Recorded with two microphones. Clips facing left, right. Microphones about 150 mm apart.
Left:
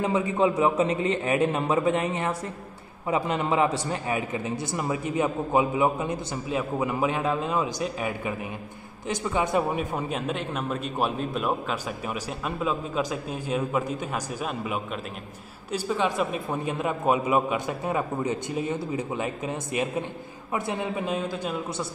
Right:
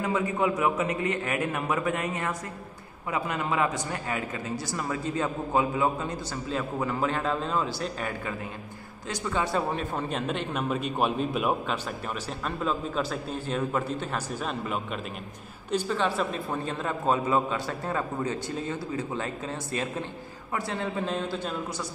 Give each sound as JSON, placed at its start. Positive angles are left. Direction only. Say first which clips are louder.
{"t": 0.0, "sound": "a man's voice", "louder": "left 3 dB", "side_deg": 25}